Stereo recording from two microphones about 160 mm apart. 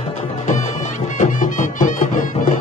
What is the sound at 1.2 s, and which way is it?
Music, 55° left (ahead or behind).